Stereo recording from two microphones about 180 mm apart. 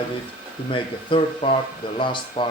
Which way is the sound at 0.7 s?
30° left (ahead or behind).